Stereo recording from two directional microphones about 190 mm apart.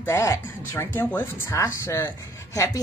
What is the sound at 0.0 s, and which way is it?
A woman's voice, 15° left (ahead or behind).